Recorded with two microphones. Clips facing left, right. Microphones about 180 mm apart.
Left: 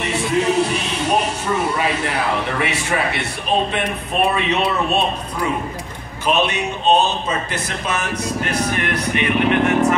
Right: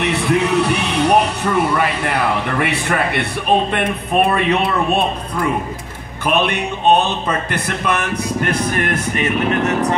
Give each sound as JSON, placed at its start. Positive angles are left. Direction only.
{"t": 0.0, "sound": "speech", "side_deg": -65}
{"t": 4.3, "sound": "speech", "side_deg": -55}